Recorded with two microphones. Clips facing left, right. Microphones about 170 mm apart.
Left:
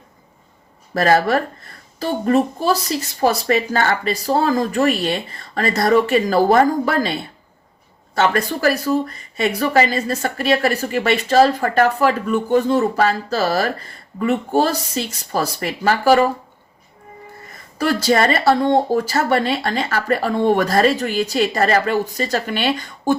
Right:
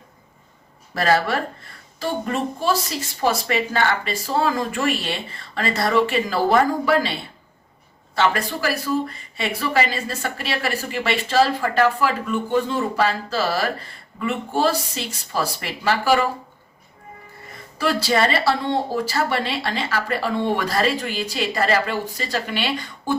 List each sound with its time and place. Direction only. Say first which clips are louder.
0.9 s speech: left 4 dB; 40° left (ahead or behind)
8.1 s speech: left 3 dB; 45° left (ahead or behind)
17.7 s speech: left 3 dB; 45° left (ahead or behind)